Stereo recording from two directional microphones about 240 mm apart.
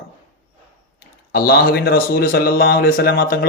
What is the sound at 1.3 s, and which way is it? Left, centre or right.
Speech, left.